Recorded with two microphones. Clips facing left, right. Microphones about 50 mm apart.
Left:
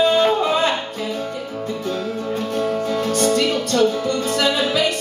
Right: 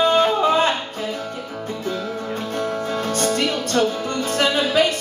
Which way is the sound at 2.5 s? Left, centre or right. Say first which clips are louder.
Left 3 dB; right.